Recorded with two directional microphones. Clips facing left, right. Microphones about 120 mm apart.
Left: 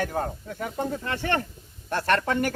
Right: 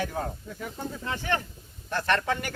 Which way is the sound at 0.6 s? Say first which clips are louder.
Left 7 dB; 65° left (ahead or behind).